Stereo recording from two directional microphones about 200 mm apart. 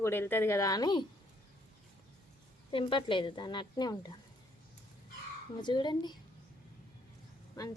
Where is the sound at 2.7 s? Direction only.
25° left (ahead or behind).